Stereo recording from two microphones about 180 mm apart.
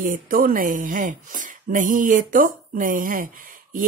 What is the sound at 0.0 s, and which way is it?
Speech, 50° right (ahead or behind).